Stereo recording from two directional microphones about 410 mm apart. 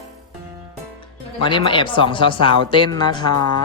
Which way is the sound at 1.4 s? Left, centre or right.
Centre.